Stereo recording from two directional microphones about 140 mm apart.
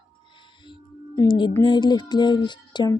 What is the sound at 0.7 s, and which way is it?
Music, 35° left (ahead or behind).